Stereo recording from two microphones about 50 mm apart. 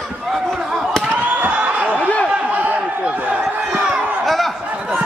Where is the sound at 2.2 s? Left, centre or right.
Right.